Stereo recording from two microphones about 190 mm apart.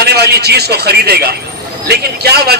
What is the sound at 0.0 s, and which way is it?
A man's voice, 60° right (ahead or behind).